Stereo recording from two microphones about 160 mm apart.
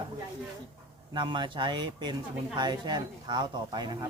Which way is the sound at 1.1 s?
30° right (ahead or behind).